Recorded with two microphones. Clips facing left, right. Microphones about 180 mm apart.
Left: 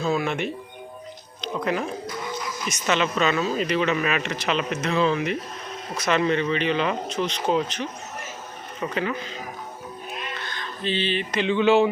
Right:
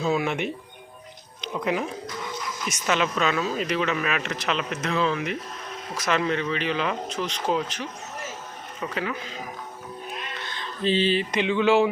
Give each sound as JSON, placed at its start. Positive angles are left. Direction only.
{"t": 0.0, "sound": "speech", "side_deg": -10}
{"t": 10.4, "sound": "a sound", "side_deg": -25}
{"t": 11.4, "sound": "speech", "side_deg": 0}